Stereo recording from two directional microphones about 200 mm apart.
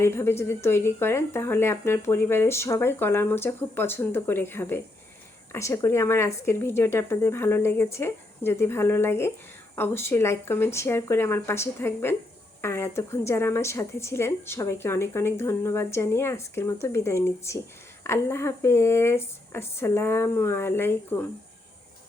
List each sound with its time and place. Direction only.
0.0 s a woman's voice: 15° left (ahead or behind)